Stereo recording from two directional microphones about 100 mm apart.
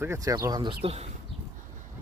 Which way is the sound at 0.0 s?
30° right (ahead or behind).